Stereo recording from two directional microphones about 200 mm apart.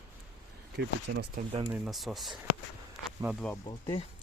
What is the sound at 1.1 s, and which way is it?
Speech, 45° right (ahead or behind).